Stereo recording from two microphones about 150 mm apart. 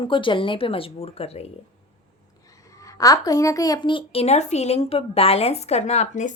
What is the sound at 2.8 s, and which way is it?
A woman's voice, 20° left (ahead or behind).